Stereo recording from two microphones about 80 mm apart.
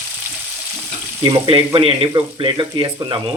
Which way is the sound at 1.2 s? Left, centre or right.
Right.